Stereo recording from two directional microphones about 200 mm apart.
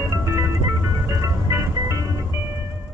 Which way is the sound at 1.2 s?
15° right (ahead or behind).